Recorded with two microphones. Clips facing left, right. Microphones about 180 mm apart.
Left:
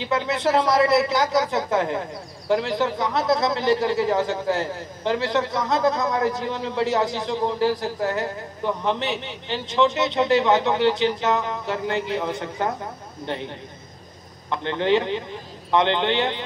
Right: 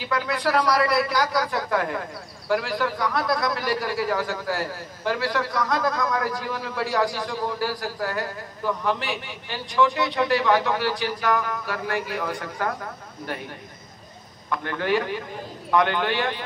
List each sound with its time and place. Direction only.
0.0 s a man's voice: 25° left (ahead or behind)
14.5 s a man's voice: 25° left (ahead or behind)